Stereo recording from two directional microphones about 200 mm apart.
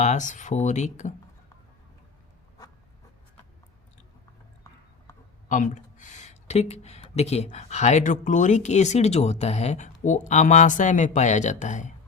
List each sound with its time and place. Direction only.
0.0 s speech: 35° left (ahead or behind)
5.1 s a sound: 15° left (ahead or behind)
5.5 s speech: 40° left (ahead or behind)